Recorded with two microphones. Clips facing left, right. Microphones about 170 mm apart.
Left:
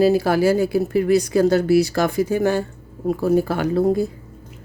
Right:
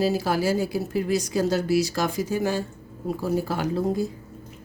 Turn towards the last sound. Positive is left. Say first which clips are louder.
# left 6 dB
turn(degrees=60)  # may be behind; listen again after turning